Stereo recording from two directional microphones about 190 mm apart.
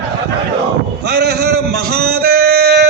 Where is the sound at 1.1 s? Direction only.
60° right (ahead or behind).